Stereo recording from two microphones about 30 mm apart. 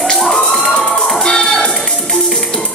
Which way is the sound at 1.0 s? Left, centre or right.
Centre.